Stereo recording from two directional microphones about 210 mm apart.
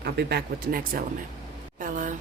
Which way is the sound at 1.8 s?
40° right (ahead or behind).